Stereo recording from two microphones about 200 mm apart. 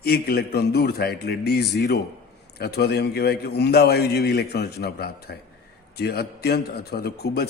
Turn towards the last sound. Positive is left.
turn(degrees=55)  # may be behind; listen again after turning